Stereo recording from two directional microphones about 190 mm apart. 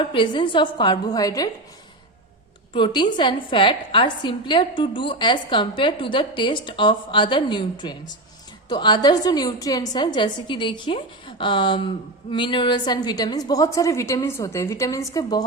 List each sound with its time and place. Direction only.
0.0 s a woman's voice: 25° left (ahead or behind)
2.7 s a woman's voice: 25° left (ahead or behind)